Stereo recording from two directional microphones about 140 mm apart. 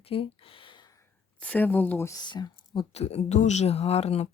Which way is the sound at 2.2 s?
30° left (ahead or behind).